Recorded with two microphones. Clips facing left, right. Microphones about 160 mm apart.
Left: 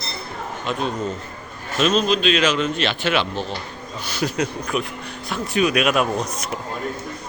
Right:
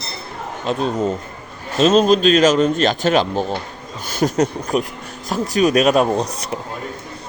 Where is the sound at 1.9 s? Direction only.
45° right (ahead or behind).